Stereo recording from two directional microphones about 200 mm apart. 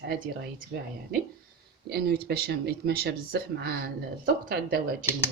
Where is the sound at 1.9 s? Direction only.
55° right (ahead or behind).